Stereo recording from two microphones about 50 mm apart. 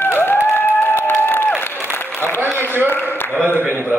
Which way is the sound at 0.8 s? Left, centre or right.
Left.